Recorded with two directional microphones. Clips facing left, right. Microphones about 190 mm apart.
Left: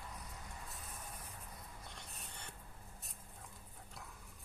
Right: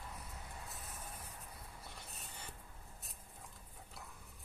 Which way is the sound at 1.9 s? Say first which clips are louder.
Even; 5° right (ahead or behind).